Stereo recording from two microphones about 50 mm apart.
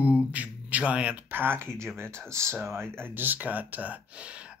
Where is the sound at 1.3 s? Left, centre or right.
Right.